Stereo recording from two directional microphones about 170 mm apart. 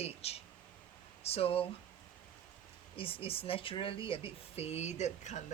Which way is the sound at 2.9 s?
35° left (ahead or behind).